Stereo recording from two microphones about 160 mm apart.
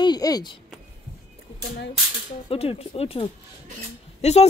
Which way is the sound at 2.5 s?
35° left (ahead or behind).